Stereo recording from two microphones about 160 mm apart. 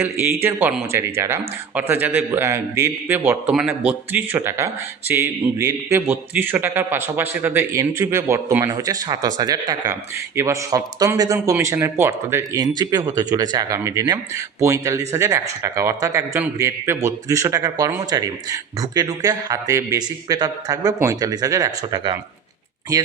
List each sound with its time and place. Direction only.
0.4 s a man's voice: 10° right (ahead or behind)